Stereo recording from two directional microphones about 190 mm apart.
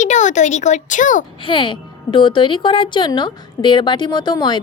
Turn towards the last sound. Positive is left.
turn(degrees=25)  # may be behind; listen again after turning